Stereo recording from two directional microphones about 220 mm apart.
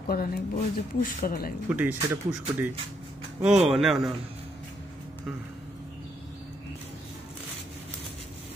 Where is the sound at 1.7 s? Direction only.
5° right (ahead or behind).